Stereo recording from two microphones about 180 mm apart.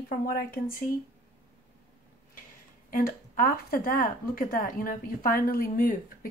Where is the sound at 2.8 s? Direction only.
50° left (ahead or behind).